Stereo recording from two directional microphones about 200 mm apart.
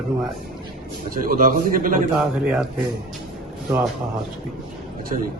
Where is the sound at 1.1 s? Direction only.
45° right (ahead or behind).